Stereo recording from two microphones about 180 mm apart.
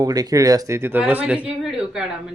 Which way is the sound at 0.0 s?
20° right (ahead or behind).